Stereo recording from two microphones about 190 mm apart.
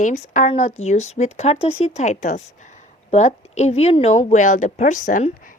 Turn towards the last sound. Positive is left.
turn(degrees=45)  # may be behind; listen again after turning